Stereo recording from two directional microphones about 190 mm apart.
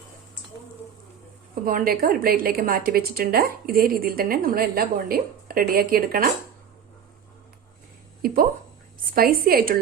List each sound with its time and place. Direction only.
1.6 s a woman's voice: 50° right (ahead or behind)
8.2 s a woman's voice: 50° right (ahead or behind)